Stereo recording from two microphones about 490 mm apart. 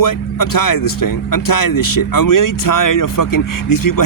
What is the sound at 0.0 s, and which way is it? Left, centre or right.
Speech, left.